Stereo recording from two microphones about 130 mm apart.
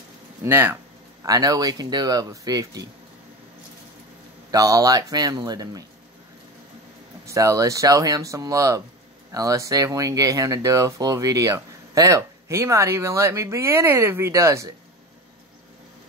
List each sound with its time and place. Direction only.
0.4 s speech: 20° right (ahead or behind)
4.5 s speech: 30° right (ahead or behind)
7.2 s speech: 25° right (ahead or behind)